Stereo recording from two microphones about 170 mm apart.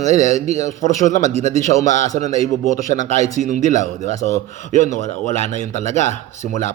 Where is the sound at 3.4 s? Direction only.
45° right (ahead or behind).